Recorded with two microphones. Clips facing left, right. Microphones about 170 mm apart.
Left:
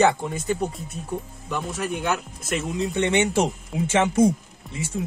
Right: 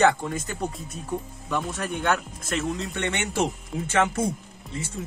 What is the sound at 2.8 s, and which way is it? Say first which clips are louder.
Speech: left 7 dB; 20° left (ahead or behind).